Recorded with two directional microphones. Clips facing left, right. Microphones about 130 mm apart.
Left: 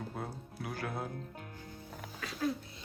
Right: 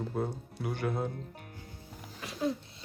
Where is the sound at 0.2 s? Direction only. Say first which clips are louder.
Right 7 dB; centre (ahead or behind).